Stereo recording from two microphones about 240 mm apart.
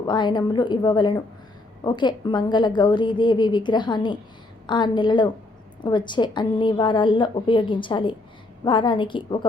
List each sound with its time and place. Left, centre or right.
0.0 s a woman's voice: centre